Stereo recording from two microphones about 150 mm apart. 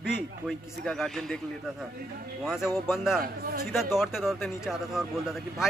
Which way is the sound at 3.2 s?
90° right.